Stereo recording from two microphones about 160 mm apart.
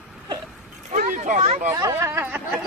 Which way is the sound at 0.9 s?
50° right (ahead or behind).